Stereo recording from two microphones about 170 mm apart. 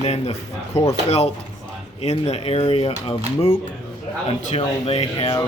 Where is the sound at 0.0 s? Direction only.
35° left (ahead or behind).